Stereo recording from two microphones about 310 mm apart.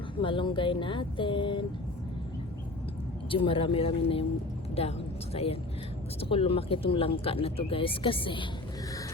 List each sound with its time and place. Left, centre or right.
0.2 s speech: centre
3.2 s a woman's voice: centre